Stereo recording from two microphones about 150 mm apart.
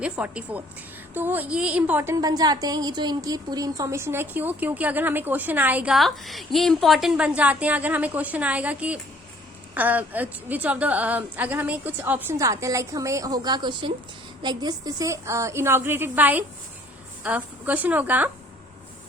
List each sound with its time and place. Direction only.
0.0 s a woman's voice: 10° right (ahead or behind)